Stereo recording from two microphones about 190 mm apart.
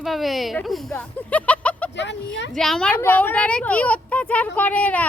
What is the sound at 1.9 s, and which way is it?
Speech, 65° left (ahead or behind).